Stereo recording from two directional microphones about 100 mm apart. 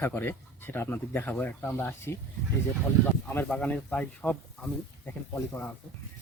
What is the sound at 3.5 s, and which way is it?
Speech, 15° left (ahead or behind).